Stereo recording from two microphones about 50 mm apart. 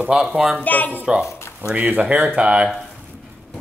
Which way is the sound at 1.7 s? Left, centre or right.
Right.